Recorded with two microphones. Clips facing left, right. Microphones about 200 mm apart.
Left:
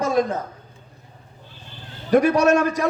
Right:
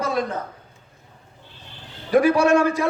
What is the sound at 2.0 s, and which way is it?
Speech, 40° left (ahead or behind).